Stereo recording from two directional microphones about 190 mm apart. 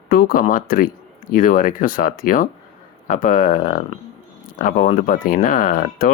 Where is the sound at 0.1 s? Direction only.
50° left (ahead or behind).